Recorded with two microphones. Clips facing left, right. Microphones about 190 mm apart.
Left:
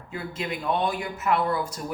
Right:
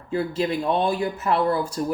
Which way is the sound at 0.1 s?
35° right (ahead or behind).